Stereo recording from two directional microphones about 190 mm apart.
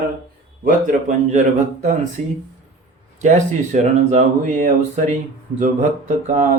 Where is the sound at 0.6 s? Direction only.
45° right (ahead or behind).